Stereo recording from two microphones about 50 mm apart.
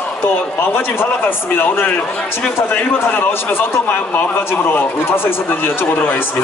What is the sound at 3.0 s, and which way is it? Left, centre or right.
Speech, left.